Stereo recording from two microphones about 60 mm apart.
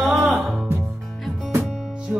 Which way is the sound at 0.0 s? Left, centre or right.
Centre.